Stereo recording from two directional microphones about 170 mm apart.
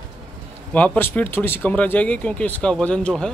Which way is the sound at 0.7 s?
10° left (ahead or behind).